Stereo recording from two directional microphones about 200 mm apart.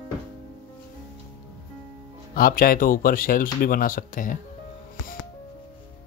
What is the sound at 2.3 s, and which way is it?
Speech, 45° left (ahead or behind).